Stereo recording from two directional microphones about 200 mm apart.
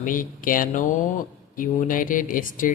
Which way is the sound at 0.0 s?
40° left (ahead or behind).